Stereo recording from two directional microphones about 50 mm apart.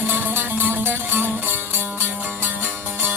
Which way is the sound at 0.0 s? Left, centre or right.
Right.